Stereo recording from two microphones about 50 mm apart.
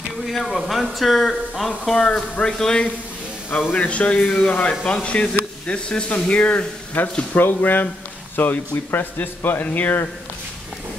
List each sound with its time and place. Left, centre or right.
0.3 s a man's voice: centre
1.9 s a man's voice: centre
3.7 s speech: left
7.3 s speech: left